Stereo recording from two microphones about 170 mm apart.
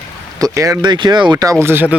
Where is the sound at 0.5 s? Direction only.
20° right (ahead or behind).